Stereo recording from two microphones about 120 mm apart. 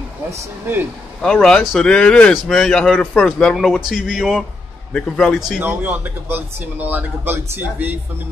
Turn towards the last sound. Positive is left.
turn(degrees=-15)  # may be behind; listen again after turning